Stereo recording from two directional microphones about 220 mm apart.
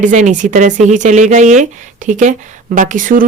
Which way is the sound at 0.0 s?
35° right (ahead or behind).